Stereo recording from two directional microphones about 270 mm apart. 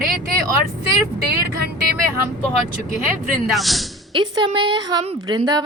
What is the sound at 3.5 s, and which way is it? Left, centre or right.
Speech, centre.